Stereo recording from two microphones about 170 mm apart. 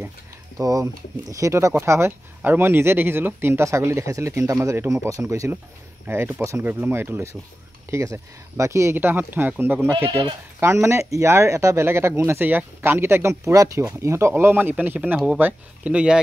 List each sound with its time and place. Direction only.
0.6 s speech: 20° right (ahead or behind)